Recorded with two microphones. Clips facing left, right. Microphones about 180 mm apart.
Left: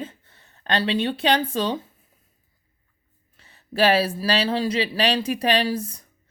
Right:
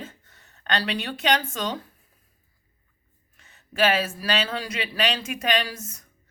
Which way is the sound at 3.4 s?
35° left (ahead or behind).